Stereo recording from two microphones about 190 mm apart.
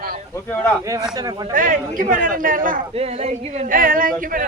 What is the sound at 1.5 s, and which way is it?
A man's voice, 45° right (ahead or behind).